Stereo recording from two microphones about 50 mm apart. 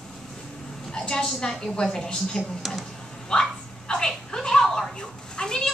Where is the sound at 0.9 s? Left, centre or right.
Centre.